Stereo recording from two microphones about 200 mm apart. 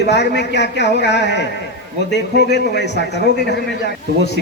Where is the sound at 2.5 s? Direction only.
55° left (ahead or behind).